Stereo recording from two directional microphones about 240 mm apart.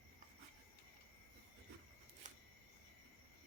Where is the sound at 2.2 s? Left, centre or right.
Right.